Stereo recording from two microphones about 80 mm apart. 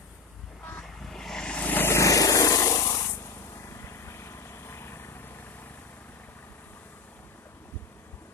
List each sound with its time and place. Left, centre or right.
0.7 s vehicle: centre
1.6 s vehicle: left